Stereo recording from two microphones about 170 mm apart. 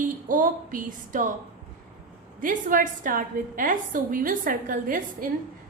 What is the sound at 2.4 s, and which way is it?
A woman's voice, 50° right (ahead or behind).